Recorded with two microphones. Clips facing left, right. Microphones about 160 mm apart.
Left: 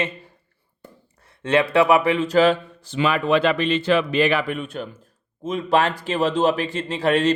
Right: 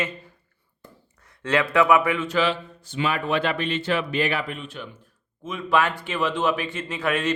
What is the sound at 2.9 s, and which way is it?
Speech, 90° left.